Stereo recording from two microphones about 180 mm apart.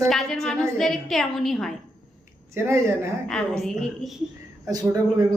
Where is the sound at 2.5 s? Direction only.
15° right (ahead or behind).